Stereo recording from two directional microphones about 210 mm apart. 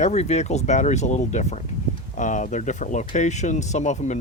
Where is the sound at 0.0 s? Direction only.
30° left (ahead or behind).